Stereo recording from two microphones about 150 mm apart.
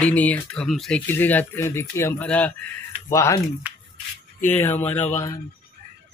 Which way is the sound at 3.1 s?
20° left (ahead or behind).